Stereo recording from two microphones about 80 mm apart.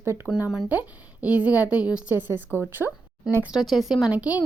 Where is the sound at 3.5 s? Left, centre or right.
Centre.